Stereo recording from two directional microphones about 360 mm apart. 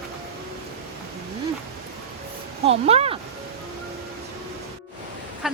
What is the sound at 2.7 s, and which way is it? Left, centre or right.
Speech, centre.